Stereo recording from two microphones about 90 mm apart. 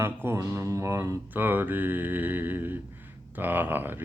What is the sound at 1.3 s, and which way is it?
Mantra, 20° right (ahead or behind).